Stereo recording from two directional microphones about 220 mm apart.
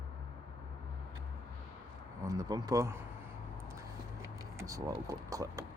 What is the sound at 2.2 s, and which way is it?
Speech, 15° right (ahead or behind).